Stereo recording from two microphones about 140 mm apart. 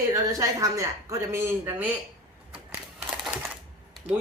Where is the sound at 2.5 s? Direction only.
10° right (ahead or behind).